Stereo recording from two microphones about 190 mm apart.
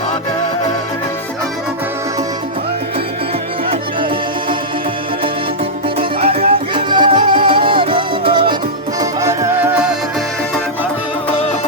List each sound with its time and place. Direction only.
6.0 s music: 30° right (ahead or behind); by 9.6 s 15° right (ahead or behind)
11.3 s music: 30° left (ahead or behind)